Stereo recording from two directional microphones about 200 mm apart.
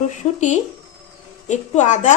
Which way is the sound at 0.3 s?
35° left (ahead or behind).